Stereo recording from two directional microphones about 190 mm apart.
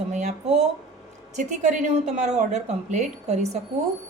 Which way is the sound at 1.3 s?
40° right (ahead or behind).